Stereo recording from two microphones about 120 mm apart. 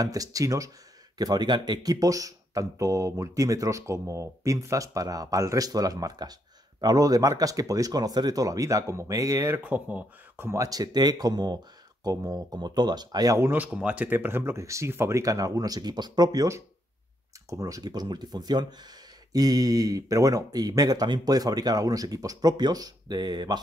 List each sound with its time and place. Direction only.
0.0 s speech: 30° right (ahead or behind)
9.6 s speech: 10° right (ahead or behind)
10.6 s speech: 30° right (ahead or behind)
13.5 s speech: 10° right (ahead or behind); by 23.6 s 35° right (ahead or behind)